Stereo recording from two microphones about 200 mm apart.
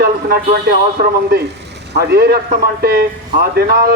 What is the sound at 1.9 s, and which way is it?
A man's voice, 55° right (ahead or behind).